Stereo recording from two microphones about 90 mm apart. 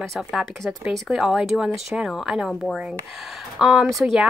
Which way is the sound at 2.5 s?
5° left (ahead or behind).